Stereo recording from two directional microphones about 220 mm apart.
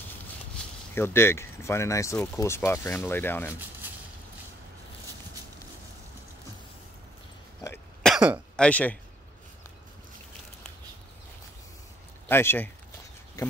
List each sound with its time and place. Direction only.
0.9 s speech: 10° left (ahead or behind)
7.6 s cough: 10° left (ahead or behind)
8.1 s cough: 5° right (ahead or behind)
8.5 s speech: 5° left (ahead or behind)
12.3 s speech: 10° left (ahead or behind)
13.4 s a sound: 15° left (ahead or behind)